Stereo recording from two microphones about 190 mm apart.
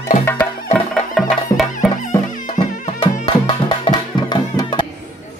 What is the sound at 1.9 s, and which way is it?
Music, 45° left (ahead or behind).